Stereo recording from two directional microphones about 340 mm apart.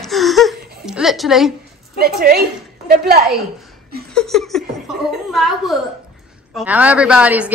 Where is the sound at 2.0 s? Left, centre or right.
Right.